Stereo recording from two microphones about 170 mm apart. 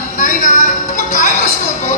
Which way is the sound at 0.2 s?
45° left (ahead or behind).